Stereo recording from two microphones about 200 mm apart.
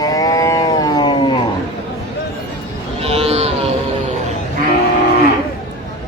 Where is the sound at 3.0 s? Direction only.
30° right (ahead or behind).